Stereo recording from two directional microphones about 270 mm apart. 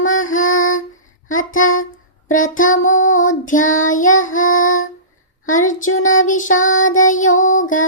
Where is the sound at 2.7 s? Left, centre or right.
Left.